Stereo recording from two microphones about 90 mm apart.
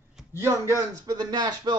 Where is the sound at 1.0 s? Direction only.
45° right (ahead or behind).